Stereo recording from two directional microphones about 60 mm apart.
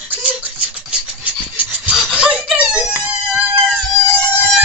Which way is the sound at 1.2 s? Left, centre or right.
Right.